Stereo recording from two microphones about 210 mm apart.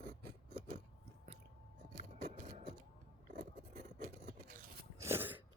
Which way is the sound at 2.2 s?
30° right (ahead or behind).